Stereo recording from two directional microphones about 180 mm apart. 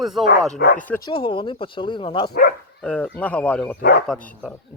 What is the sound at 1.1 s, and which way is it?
Speech, 30° left (ahead or behind).